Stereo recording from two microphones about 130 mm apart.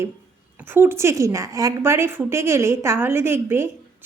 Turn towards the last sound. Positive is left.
turn(degrees=-20)  # may be behind; listen again after turning